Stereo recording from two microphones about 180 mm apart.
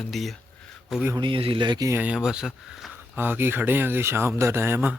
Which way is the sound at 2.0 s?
5° right (ahead or behind).